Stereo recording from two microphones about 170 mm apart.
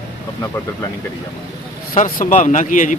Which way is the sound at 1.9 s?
45° left (ahead or behind).